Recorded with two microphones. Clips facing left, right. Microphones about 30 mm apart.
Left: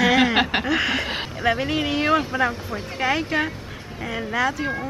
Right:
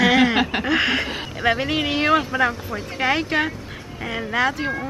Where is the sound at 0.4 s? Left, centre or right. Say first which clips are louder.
Left 1 dB; left.